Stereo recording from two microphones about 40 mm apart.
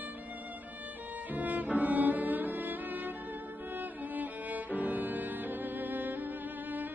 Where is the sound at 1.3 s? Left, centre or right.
Right.